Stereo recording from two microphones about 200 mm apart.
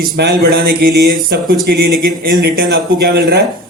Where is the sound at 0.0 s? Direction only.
50° right (ahead or behind).